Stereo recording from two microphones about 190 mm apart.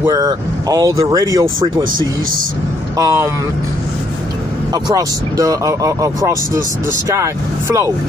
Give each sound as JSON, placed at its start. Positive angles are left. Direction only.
{"t": 0.0, "sound": "speech", "side_deg": -20}
{"t": 3.0, "sound": "speech", "side_deg": -15}
{"t": 4.8, "sound": "speech", "side_deg": -20}